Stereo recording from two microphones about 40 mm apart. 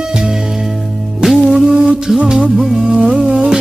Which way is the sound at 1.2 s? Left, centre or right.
Centre.